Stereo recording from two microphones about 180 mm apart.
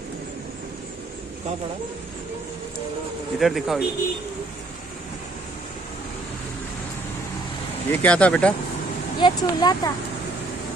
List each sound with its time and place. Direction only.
3.3 s a man's voice: centre (ahead or behind)
7.9 s speech: 10° left (ahead or behind)
9.2 s speech: 25° left (ahead or behind)